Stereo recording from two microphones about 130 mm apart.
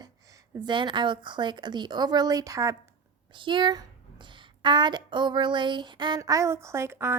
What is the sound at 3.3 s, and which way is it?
A woman's voice, 40° right (ahead or behind).